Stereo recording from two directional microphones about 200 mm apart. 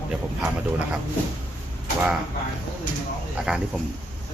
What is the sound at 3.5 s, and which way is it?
Speech, 5° right (ahead or behind).